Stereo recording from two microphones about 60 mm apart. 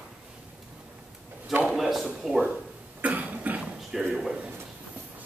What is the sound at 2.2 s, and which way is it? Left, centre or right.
Speech, centre.